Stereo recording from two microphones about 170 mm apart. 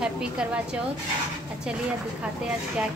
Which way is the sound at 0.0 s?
5° right (ahead or behind).